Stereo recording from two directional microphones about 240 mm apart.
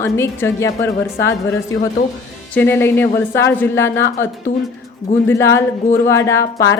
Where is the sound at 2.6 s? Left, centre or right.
Centre.